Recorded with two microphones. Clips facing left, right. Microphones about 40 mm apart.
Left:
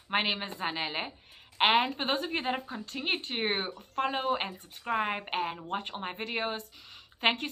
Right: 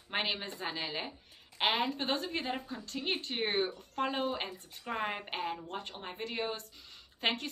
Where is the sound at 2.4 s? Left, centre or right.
Left.